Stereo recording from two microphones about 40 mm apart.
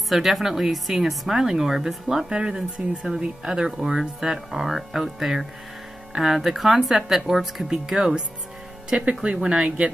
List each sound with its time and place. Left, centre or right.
0.1 s speech: centre
2.2 s speech: right
2.8 s speech: right
3.2 s speech: centre
8.9 s speech: right